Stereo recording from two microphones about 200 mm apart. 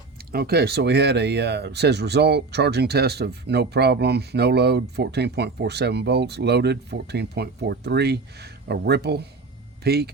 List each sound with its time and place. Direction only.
0.3 s speech: 50° right (ahead or behind)